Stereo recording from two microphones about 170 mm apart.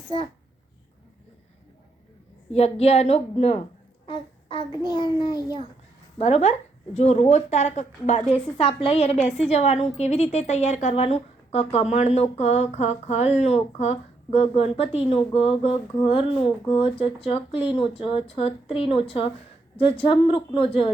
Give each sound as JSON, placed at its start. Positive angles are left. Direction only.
{"t": 2.5, "sound": "a woman's voice", "side_deg": 35}
{"t": 6.1, "sound": "a woman's voice", "side_deg": 40}